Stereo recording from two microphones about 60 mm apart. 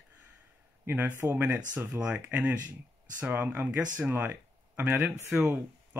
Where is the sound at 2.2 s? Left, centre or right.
Right.